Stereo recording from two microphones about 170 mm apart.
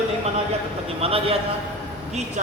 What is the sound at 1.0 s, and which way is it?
Speech, 35° right (ahead or behind).